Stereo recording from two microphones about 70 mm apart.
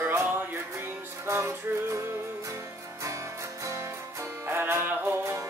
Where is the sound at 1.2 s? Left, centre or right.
Right.